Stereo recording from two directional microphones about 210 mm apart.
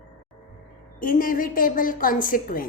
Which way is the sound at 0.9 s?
40° left (ahead or behind).